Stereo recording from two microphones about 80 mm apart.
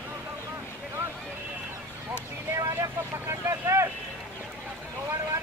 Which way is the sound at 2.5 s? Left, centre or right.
Right.